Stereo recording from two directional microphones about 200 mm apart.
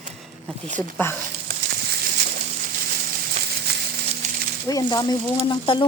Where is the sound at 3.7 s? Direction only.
55° right (ahead or behind).